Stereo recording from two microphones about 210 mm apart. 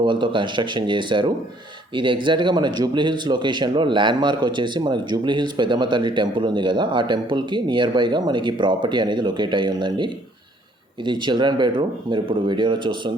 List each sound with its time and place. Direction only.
0.0 s speech: 20° right (ahead or behind)